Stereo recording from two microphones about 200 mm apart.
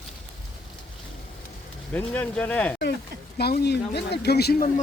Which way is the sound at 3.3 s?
55° left (ahead or behind).